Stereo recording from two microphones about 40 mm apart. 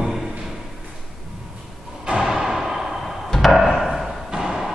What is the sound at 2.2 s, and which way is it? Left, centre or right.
Music, centre.